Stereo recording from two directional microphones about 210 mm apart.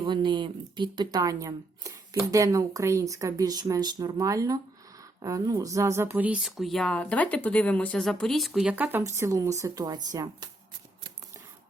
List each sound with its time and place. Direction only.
0.0 s speech: 20° right (ahead or behind)